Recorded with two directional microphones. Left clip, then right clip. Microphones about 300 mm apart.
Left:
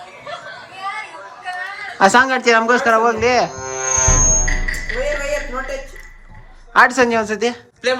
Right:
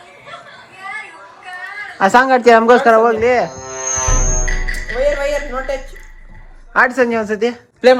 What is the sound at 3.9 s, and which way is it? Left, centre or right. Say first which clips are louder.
Music: left 4 dB; right.